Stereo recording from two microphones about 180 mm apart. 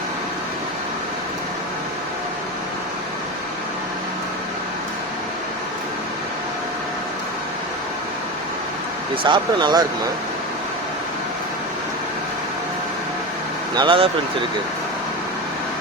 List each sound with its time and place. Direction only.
9.2 s speech: 25° right (ahead or behind)
13.7 s speech: 30° right (ahead or behind)